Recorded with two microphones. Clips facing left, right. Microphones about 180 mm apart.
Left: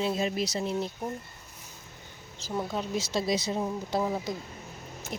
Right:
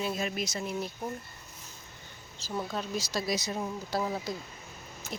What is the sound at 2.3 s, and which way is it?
Speech, 20° left (ahead or behind).